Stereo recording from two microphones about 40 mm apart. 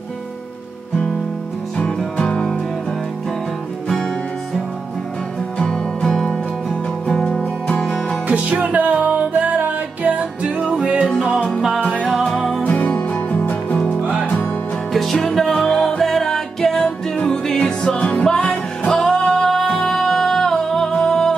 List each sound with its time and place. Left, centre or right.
2.1 s music: centre
7.6 s music: left
8.3 s music: right
10.4 s music: right
12.3 s music: centre
12.6 s music: left
14.9 s music: centre
17.2 s music: left
19.9 s music: centre